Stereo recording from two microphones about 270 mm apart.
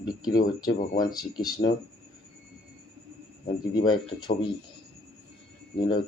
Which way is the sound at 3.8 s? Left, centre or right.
Centre.